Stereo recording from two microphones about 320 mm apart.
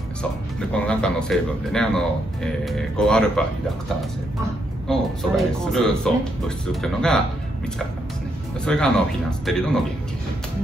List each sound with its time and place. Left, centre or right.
0.2 s speech: centre
4.8 s speech: centre
8.6 s speech: centre